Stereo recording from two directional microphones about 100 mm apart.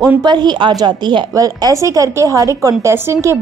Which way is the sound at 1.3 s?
35° right (ahead or behind).